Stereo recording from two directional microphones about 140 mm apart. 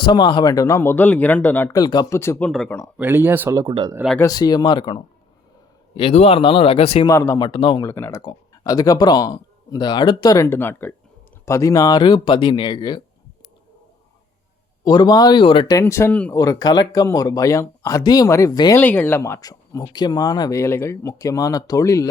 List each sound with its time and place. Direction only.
0.0 s speech: 35° left (ahead or behind); by 1.7 s 15° left (ahead or behind)
1.7 s speech: 30° left (ahead or behind)
2.1 s speech: 20° left (ahead or behind)
3.0 s speech: 15° right (ahead or behind)
3.7 s speech: 35° right (ahead or behind)
4.2 s speech: 25° left (ahead or behind); by 7.1 s 45° left (ahead or behind)
7.1 s speech: 20° left (ahead or behind)
7.9 s speech: 20° left (ahead or behind)
8.2 s speech: 30° left (ahead or behind)
14.8 s speech: 30° left (ahead or behind)
15.8 s speech: 20° left (ahead or behind)
16.3 s speech: 25° left (ahead or behind)
18.8 s speech: 15° left (ahead or behind)